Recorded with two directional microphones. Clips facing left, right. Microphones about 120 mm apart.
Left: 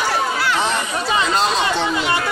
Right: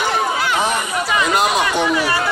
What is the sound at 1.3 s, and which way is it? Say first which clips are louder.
Speech: right 1 dB; 15° right (ahead or behind).